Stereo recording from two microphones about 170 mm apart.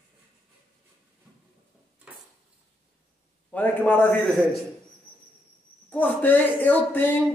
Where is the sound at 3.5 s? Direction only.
10° left (ahead or behind).